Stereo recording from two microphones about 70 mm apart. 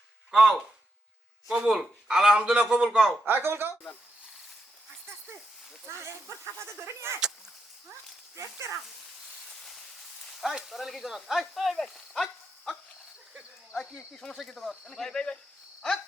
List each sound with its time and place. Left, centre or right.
0.3 s a man's voice: centre
3.2 s speech: right
5.8 s speech: right
8.4 s speech: right
10.3 s speech: centre
14.1 s speech: centre